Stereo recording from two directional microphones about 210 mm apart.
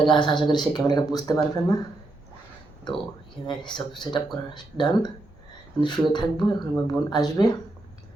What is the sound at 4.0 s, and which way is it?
Speech, 20° left (ahead or behind).